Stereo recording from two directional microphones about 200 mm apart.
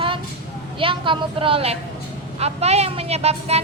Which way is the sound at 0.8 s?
25° right (ahead or behind).